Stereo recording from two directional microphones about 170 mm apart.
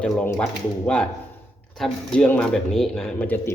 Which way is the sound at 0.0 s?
10° left (ahead or behind).